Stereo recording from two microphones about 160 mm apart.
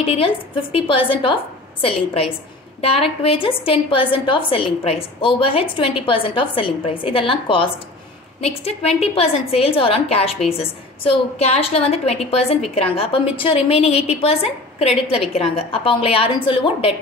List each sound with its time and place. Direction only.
0.0 s a woman's voice: 35° left (ahead or behind)